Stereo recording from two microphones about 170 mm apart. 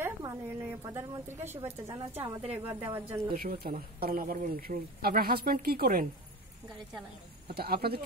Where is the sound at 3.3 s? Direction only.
60° right (ahead or behind).